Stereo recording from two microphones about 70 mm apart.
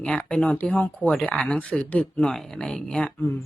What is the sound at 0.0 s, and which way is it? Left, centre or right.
A woman's voice, centre.